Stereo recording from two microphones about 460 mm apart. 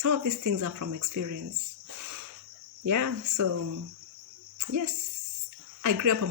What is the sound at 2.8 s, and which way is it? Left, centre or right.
Speech, right.